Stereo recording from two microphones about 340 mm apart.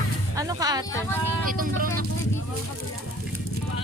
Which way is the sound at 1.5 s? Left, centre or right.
Right.